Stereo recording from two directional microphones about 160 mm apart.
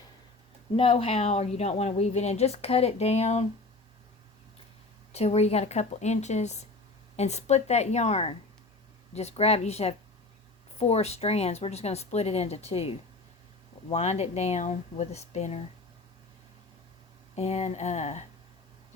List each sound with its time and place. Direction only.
0.8 s a woman's voice: 35° left (ahead or behind)
5.1 s a woman's voice: 40° left (ahead or behind)
13.9 s speech: 45° left (ahead or behind)
17.3 s a woman's voice: 40° left (ahead or behind)